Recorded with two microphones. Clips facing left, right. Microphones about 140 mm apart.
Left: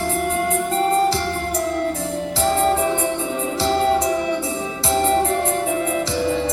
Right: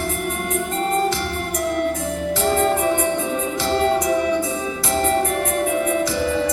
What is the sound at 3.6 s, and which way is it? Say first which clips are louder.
Music: left 2 dB; 30° left (ahead or behind).